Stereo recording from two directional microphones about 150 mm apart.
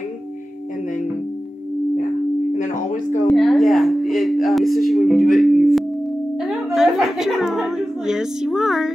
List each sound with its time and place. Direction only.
2.5 s tuning fork: 55° left (ahead or behind)
3.3 s a woman's voice: centre (ahead or behind)